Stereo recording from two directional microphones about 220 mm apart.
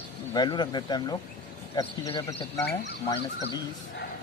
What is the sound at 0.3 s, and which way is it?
A man's voice, 20° left (ahead or behind).